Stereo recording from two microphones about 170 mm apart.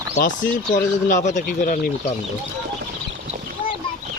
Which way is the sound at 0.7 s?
50° left (ahead or behind).